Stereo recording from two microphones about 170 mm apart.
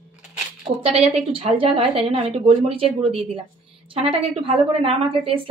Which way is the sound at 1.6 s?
30° right (ahead or behind).